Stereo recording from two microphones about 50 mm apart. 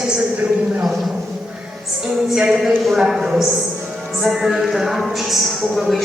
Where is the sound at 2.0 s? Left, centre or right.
Centre.